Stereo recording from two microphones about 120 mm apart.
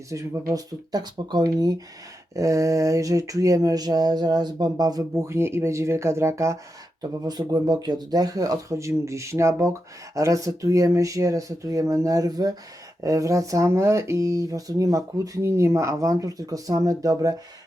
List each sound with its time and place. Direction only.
0.1 s speech: 30° right (ahead or behind)